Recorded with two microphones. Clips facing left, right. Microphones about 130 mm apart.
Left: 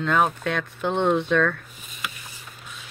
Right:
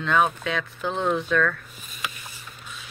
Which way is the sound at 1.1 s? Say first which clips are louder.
Left 1 dB; 25° left (ahead or behind).